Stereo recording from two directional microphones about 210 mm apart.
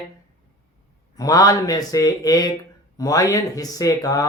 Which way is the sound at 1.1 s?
15° left (ahead or behind).